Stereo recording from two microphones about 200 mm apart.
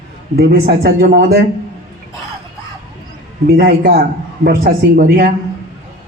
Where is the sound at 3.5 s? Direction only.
55° right (ahead or behind).